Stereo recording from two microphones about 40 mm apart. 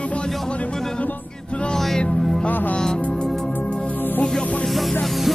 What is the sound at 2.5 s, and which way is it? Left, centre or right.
Music, left.